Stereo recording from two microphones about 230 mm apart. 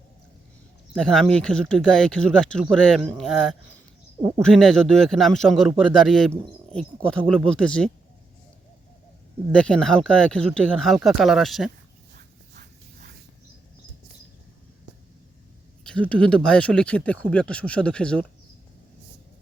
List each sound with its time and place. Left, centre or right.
0.9 s speech: centre
9.5 s speech: centre
15.8 s speech: centre